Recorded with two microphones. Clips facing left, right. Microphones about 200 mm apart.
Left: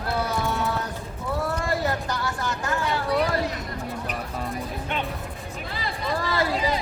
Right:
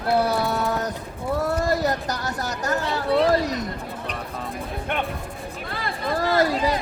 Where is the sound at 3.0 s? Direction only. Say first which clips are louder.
Right 5 dB; 25° right (ahead or behind).